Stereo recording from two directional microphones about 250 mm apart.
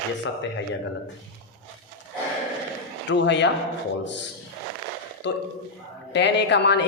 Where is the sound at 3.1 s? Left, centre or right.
Left.